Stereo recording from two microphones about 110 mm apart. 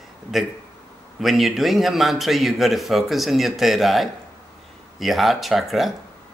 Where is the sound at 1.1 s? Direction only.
Centre (ahead or behind).